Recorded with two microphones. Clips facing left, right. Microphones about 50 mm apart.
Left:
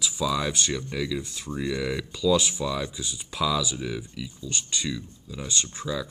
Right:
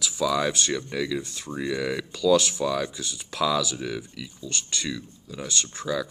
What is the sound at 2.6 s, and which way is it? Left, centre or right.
Speech, centre.